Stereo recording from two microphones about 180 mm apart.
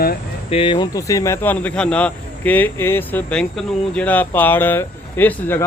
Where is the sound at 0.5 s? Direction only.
30° left (ahead or behind).